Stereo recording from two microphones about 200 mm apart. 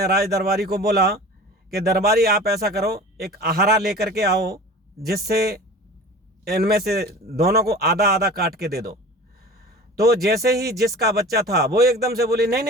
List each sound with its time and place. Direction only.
0.0 s a man's voice: 50° right (ahead or behind)